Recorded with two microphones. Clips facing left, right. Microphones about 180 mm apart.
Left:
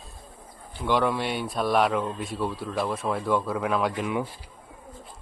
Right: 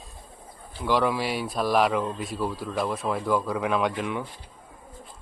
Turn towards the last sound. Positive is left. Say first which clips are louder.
# left 1 dB
turn(degrees=5)  # may be behind; listen again after turning